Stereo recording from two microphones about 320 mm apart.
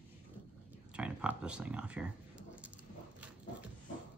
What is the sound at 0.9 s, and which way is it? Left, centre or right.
Speech, centre.